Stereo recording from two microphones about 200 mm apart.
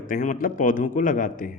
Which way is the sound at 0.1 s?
45° left (ahead or behind).